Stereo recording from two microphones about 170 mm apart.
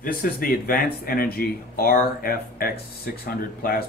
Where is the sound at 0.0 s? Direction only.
55° left (ahead or behind).